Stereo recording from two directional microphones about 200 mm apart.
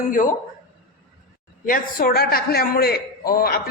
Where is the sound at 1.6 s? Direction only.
45° left (ahead or behind).